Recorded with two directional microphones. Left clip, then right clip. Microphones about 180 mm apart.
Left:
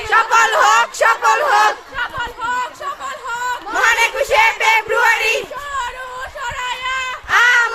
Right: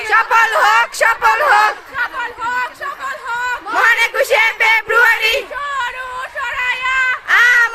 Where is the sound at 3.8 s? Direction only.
35° right (ahead or behind).